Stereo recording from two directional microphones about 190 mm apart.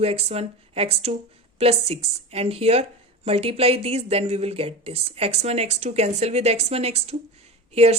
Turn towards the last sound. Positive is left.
turn(degrees=-35)  # may be behind; listen again after turning